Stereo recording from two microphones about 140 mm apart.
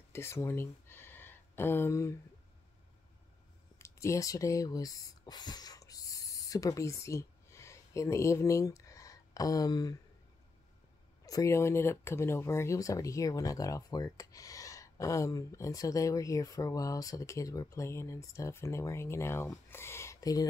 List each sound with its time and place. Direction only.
0.1 s a sound: 20° left (ahead or behind)
3.7 s speech: 20° left (ahead or behind)
11.2 s speech: 25° left (ahead or behind)